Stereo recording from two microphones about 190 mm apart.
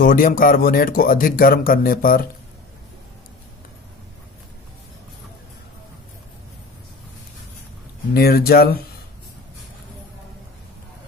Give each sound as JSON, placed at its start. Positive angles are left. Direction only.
{"t": 0.0, "sound": "speech", "side_deg": 50}
{"t": 8.1, "sound": "speech", "side_deg": 55}